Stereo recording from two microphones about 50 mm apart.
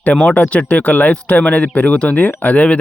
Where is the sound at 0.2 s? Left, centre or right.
Left.